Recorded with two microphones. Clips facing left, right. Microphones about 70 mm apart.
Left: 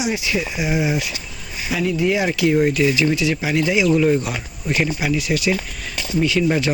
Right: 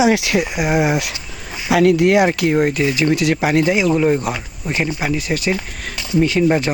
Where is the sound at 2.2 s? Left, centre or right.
Right.